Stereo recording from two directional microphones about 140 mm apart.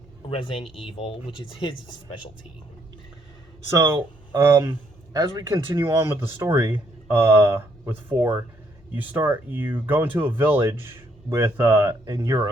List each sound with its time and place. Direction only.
0.3 s speech: 40° left (ahead or behind)
3.7 s speech: 25° right (ahead or behind)